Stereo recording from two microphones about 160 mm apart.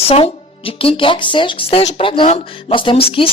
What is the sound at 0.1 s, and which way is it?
A woman's voice, 35° left (ahead or behind).